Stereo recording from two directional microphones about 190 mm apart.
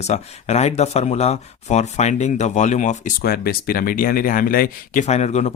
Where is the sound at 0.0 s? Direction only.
35° left (ahead or behind).